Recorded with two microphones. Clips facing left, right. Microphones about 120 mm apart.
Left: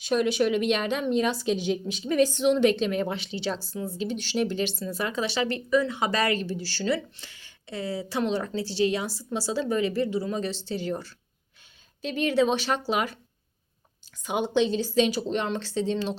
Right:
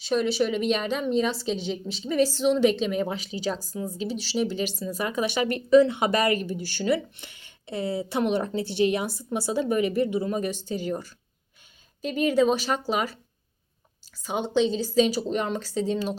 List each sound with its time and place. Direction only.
0.0 s a woman's voice: 5° left (ahead or behind)
14.3 s a woman's voice: 5° left (ahead or behind)